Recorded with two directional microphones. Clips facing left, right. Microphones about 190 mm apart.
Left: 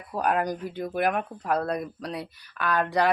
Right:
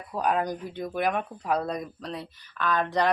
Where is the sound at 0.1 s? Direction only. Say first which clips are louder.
Left 1 dB; 5° left (ahead or behind).